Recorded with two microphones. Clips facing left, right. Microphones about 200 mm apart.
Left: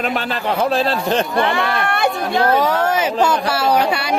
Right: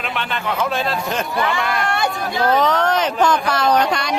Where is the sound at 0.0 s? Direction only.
40° left (ahead or behind).